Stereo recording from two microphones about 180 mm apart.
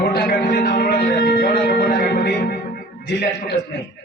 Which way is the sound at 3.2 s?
55° left (ahead or behind).